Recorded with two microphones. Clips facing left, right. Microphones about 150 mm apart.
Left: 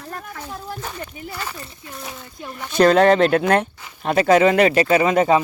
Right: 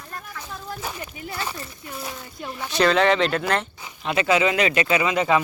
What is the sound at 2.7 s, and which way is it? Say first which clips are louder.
Speech: left 5 dB; 45° left (ahead or behind).